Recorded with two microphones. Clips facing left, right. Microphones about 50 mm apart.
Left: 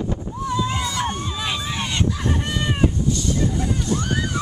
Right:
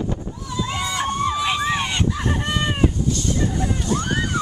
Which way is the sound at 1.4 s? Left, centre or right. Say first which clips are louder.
Right 5 dB; centre.